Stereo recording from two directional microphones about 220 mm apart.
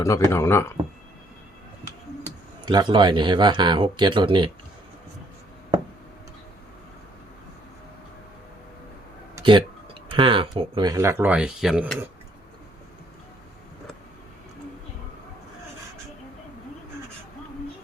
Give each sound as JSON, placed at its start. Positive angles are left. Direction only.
{"t": 0.0, "sound": "speech", "side_deg": 15}
{"t": 2.2, "sound": "speech", "side_deg": -20}
{"t": 9.3, "sound": "a sound", "side_deg": -20}
{"t": 10.1, "sound": "speech", "side_deg": -25}